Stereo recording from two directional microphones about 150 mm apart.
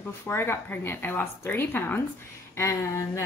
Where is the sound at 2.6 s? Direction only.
20° left (ahead or behind).